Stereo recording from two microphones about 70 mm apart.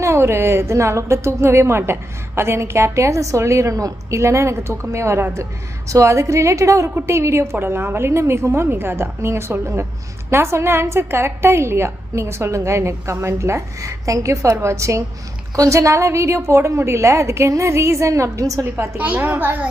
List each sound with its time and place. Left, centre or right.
0.0 s a woman's voice: right
18.9 s a woman's voice: right